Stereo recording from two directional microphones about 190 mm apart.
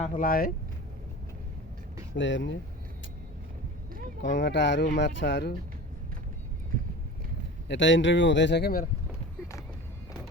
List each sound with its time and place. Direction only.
0.2 s speech: 50° left (ahead or behind)
2.1 s speech: 75° left (ahead or behind)
4.4 s speech: 70° left (ahead or behind)
7.7 s speech: 75° left (ahead or behind); by 8.9 s 55° left (ahead or behind)